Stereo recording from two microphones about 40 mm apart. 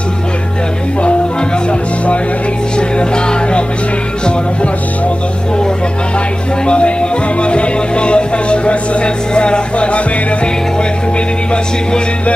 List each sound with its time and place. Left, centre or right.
3.0 s music: left
6.6 s music: left